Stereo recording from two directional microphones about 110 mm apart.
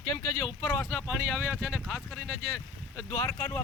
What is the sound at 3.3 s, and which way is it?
Speech, 10° left (ahead or behind).